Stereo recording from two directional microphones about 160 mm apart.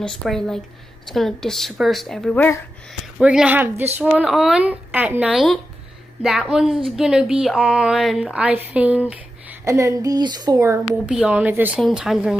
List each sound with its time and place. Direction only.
0.0 s a woman's voice: centre (ahead or behind)
3.2 s a woman's voice: 5° right (ahead or behind); by 10.8 s 20° right (ahead or behind)
11.1 s a woman's voice: 5° right (ahead or behind)